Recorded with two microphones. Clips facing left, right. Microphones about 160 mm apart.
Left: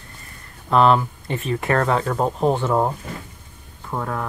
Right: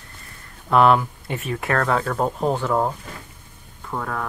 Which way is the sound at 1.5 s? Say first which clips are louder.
Left 2 dB; 5° left (ahead or behind).